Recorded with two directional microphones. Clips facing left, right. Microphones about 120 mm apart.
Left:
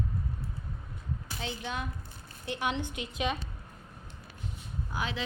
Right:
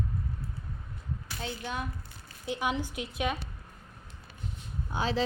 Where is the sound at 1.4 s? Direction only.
5° right (ahead or behind).